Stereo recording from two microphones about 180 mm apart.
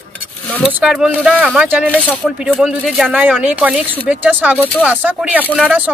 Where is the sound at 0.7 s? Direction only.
5° right (ahead or behind).